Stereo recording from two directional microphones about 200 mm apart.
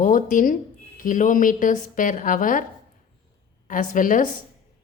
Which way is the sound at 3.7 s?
40° left (ahead or behind).